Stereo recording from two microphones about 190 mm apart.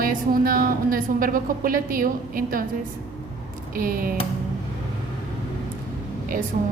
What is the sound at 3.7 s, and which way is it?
Speech, 50° right (ahead or behind).